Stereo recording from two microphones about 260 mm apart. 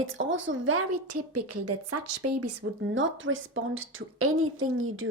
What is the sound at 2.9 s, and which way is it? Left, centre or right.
A woman's voice, right.